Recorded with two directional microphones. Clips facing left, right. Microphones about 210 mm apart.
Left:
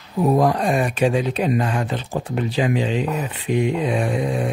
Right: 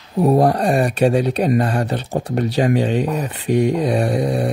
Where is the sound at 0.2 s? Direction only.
30° right (ahead or behind).